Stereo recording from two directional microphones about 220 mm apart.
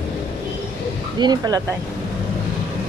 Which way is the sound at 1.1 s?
20° right (ahead or behind).